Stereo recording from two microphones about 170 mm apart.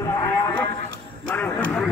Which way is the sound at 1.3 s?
10° left (ahead or behind).